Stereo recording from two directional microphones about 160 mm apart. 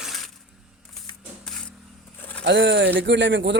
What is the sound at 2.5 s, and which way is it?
Speech, 90° right.